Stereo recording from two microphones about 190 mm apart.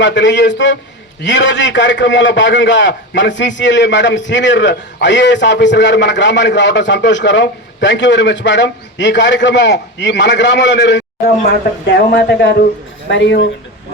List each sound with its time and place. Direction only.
0.0 s a man's voice: 70° left (ahead or behind)
12.1 s a man's voice: 60° left (ahead or behind)